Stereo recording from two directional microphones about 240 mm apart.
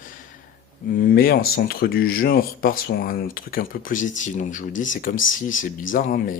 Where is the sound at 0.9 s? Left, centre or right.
Left.